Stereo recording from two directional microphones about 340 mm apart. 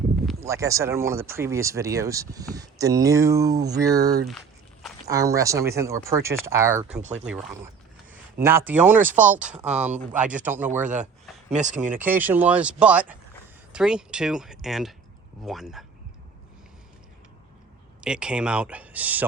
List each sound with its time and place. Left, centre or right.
0.3 s speech: centre
4.3 s speech: centre
7.0 s speech: right
8.4 s speech: centre
9.6 s speech: centre
10.0 s speech: centre
10.8 s speech: right
11.9 s speech: centre
18.0 s speech: centre